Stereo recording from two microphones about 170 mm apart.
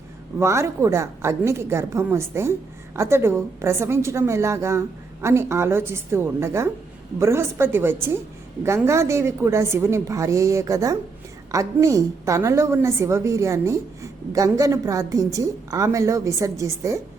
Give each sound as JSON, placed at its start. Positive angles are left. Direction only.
{"t": 0.3, "sound": "a woman's voice", "side_deg": -15}